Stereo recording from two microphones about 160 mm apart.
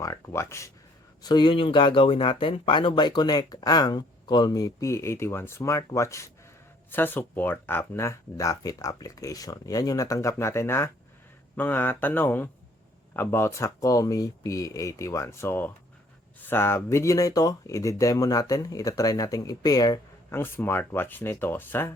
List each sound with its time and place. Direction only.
0.0 s speech: 20° left (ahead or behind)
1.2 s speech: 25° left (ahead or behind)